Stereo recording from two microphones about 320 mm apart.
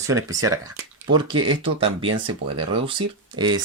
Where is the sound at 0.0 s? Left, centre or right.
Centre.